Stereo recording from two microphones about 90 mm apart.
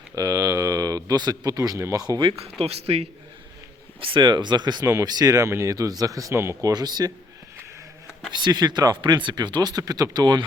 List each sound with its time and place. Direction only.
0.2 s speech: 40° right (ahead or behind)
2.0 s speech: 55° right (ahead or behind)
2.6 s speech: 90° right
4.0 s speech: 60° right (ahead or behind); by 6.3 s 40° right (ahead or behind)
6.3 s speech: 30° right (ahead or behind); by 7.1 s 50° right (ahead or behind)
8.3 s speech: 55° right (ahead or behind)